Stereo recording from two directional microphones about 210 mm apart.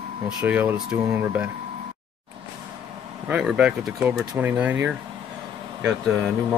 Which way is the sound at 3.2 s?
5° right (ahead or behind).